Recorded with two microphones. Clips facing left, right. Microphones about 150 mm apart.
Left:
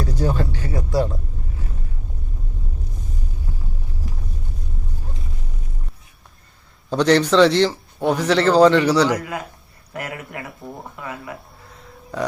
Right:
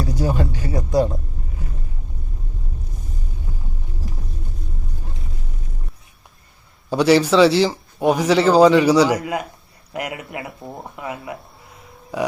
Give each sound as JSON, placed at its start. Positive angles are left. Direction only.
{"t": 0.0, "sound": "a sound", "side_deg": -10}
{"t": 0.9, "sound": "speech", "side_deg": -20}
{"t": 6.9, "sound": "speech", "side_deg": -10}